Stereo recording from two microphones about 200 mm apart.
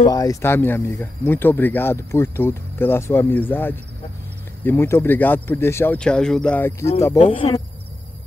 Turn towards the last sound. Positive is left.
turn(degrees=30)  # may be behind; listen again after turning